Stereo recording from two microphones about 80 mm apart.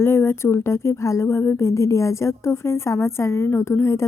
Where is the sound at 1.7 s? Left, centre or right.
Left.